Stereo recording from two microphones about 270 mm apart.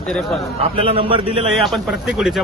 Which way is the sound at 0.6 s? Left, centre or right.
Centre.